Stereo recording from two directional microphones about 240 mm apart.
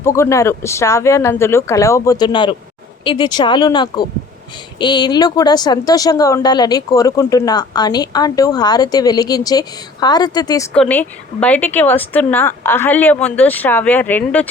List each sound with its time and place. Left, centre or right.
0.0 s a woman's voice: centre
10.8 s a woman's voice: centre